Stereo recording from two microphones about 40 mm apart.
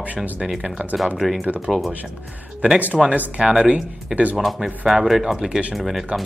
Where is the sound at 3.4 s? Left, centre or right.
Centre.